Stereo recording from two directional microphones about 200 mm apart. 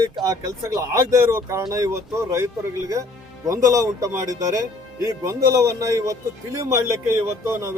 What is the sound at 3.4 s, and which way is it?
Speech, 15° right (ahead or behind).